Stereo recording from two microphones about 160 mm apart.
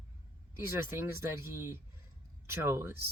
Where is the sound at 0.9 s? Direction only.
15° right (ahead or behind).